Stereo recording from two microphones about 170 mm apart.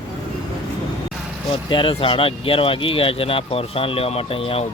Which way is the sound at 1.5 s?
30° left (ahead or behind).